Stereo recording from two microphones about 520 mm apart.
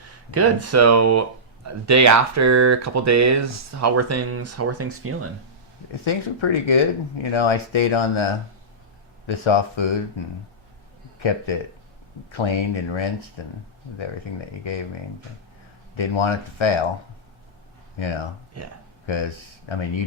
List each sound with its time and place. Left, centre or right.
0.3 s speech: right
6.1 s speech: left
11.2 s speech: left
16.0 s speech: left
18.5 s speech: right
19.0 s speech: left